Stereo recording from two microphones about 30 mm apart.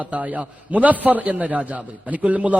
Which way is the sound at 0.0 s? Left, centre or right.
Right.